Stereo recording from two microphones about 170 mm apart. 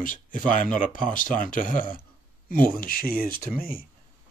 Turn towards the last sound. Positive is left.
turn(degrees=60)  # may be behind; listen again after turning